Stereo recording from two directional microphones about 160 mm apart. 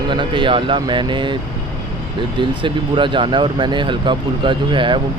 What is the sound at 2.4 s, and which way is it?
Speech, 30° right (ahead or behind).